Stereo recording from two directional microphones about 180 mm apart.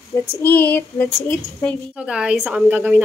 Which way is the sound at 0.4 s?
10° left (ahead or behind).